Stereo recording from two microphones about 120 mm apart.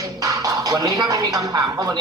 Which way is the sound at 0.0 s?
30° right (ahead or behind).